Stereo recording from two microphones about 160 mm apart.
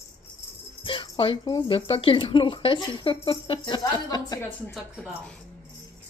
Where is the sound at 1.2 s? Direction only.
35° left (ahead or behind).